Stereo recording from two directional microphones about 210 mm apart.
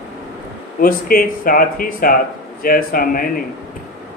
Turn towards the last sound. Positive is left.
turn(degrees=45)  # may be behind; listen again after turning